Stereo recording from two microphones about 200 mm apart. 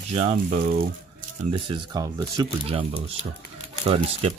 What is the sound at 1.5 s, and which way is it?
Speech, 25° right (ahead or behind).